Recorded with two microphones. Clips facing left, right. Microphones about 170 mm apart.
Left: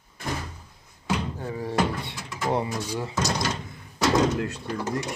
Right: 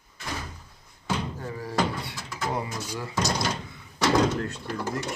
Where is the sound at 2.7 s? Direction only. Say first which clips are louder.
Left 4 dB; 20° left (ahead or behind).